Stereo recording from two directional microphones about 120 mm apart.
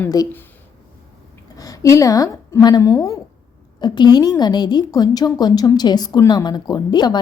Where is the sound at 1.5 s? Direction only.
30° left (ahead or behind).